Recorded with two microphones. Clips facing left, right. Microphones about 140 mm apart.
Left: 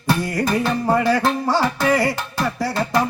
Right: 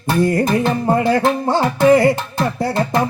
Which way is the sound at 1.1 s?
50° right (ahead or behind).